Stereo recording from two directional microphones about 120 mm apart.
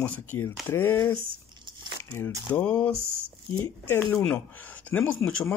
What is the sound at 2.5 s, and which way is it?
Speech, 10° left (ahead or behind).